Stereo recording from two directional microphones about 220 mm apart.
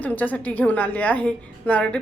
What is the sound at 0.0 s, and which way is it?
A woman's voice, 5° left (ahead or behind).